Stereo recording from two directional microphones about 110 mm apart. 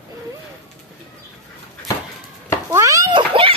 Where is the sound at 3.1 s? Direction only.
50° right (ahead or behind).